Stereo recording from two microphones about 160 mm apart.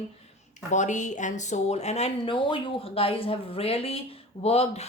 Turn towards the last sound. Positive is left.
turn(degrees=40)  # may be behind; listen again after turning